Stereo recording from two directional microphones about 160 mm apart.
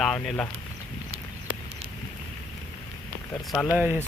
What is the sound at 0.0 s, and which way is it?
Speech, 5° left (ahead or behind).